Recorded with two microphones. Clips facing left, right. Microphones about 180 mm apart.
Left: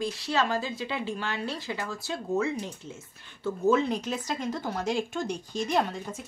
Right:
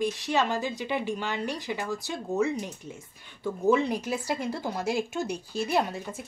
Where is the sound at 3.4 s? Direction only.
10° right (ahead or behind).